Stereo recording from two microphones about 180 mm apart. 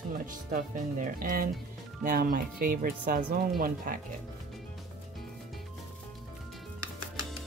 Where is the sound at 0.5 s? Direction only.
50° right (ahead or behind).